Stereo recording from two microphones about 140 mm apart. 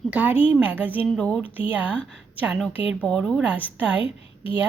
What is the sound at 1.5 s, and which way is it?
Speech, 10° right (ahead or behind).